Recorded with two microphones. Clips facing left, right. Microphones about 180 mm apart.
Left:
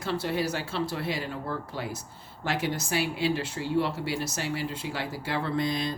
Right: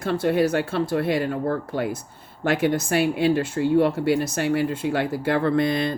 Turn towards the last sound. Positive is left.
turn(degrees=-60)  # may be behind; listen again after turning